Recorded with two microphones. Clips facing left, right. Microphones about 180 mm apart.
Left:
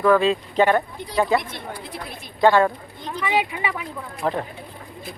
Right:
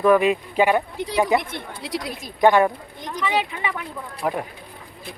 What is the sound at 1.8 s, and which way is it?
Speech, 90° right.